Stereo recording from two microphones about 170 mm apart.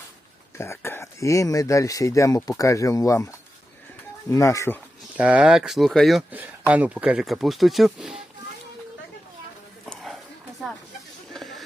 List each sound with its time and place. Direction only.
0.5 s speech: 15° left (ahead or behind)
4.3 s speech: 20° left (ahead or behind)
5.1 s speech: 10° right (ahead or behind)
9.8 s a sound: centre (ahead or behind)